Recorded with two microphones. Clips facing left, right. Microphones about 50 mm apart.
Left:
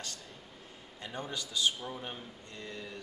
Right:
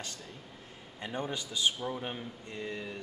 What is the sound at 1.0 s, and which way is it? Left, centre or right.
A man's voice, right.